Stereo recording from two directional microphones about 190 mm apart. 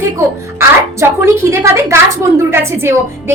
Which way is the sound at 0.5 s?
15° right (ahead or behind).